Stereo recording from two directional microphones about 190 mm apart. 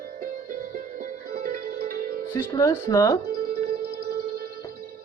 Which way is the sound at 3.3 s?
55° right (ahead or behind).